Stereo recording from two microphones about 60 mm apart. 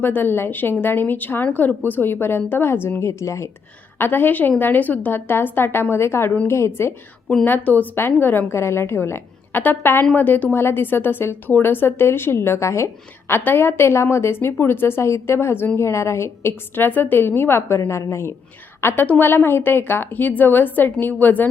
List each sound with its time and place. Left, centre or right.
0.0 s speech: left
3.0 s speech: left
3.9 s a woman's voice: left
7.4 s speech: left
8.5 s a woman's voice: left
18.8 s a woman's voice: left